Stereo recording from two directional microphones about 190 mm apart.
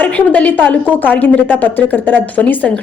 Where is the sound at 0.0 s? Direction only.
10° left (ahead or behind).